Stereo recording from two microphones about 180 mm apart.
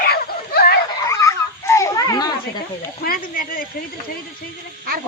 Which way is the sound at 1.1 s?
15° left (ahead or behind).